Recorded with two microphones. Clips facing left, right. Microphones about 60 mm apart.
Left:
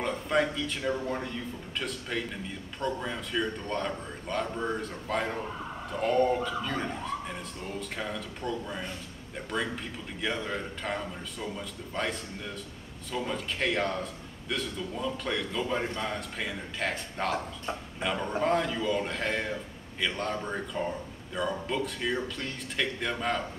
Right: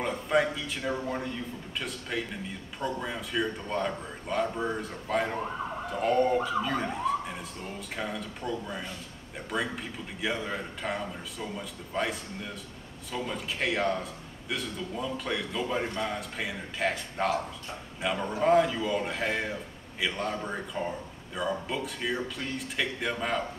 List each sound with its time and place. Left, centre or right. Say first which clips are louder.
0.0 s a man's voice: right 1 dB; centre
6.4 s speech: right 3 dB; centre